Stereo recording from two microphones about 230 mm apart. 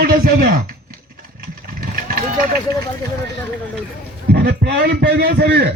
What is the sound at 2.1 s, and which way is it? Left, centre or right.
Speech, right.